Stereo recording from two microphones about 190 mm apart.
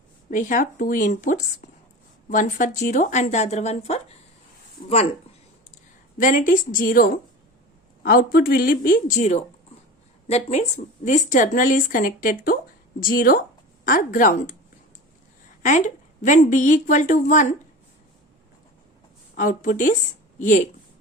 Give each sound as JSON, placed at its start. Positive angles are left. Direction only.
{"t": 0.3, "sound": "a woman's voice", "side_deg": 40}
{"t": 6.1, "sound": "a woman's voice", "side_deg": 45}
{"t": 16.2, "sound": "speech", "side_deg": 40}
{"t": 19.4, "sound": "a woman's voice", "side_deg": 45}